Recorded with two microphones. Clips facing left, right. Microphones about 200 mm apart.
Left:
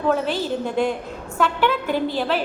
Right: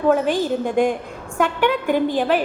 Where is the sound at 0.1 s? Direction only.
15° right (ahead or behind).